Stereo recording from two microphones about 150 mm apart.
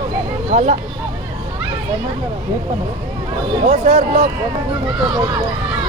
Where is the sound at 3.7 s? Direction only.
50° right (ahead or behind).